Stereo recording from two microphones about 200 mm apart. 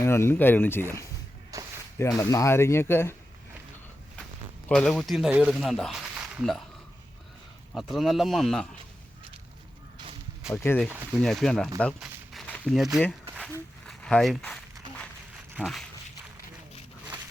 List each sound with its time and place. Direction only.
0.0 s speech: 10° left (ahead or behind)
1.5 s walk: 15° right (ahead or behind)
2.0 s speech: 15° left (ahead or behind)
4.7 s speech: centre (ahead or behind)
7.7 s speech: centre (ahead or behind)
10.4 s speech: 10° left (ahead or behind)
13.5 s a sound: 5° left (ahead or behind)
15.5 s speech: centre (ahead or behind)